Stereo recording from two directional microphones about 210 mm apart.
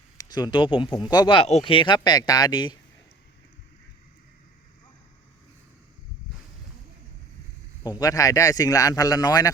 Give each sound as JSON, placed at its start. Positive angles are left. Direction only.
{"t": 0.2, "sound": "speech", "side_deg": 20}
{"t": 7.9, "sound": "speech", "side_deg": 15}